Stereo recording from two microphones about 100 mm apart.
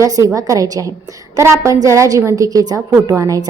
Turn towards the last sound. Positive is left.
turn(degrees=-35)  # may be behind; listen again after turning